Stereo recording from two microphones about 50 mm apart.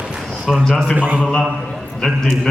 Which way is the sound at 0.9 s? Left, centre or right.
Right.